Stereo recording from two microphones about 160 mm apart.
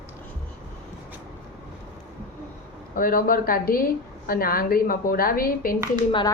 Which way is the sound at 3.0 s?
65° left (ahead or behind).